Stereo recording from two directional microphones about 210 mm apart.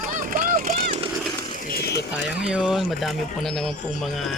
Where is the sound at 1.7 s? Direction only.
50° left (ahead or behind).